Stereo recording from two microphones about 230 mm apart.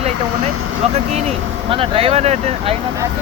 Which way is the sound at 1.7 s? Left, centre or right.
Right.